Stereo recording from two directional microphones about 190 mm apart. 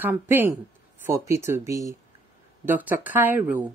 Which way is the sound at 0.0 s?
10° right (ahead or behind).